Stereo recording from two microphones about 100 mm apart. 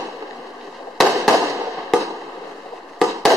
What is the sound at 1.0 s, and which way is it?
Fireworks, centre (ahead or behind).